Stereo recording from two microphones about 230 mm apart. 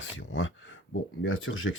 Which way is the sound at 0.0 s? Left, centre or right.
Left.